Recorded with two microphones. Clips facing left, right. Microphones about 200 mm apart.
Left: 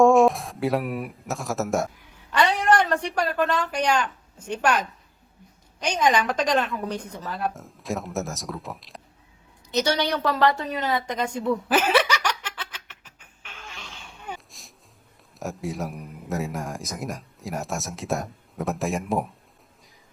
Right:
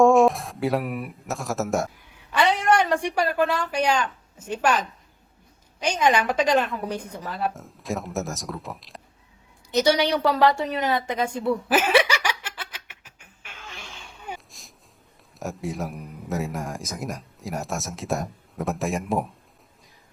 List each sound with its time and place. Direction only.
0.0 s a woman's voice: centre (ahead or behind)
5.8 s a man's voice: 10° right (ahead or behind)
9.7 s a woman's voice: 10° right (ahead or behind)
10.6 s chuckle: 10° right (ahead or behind)
15.4 s a man's voice: centre (ahead or behind)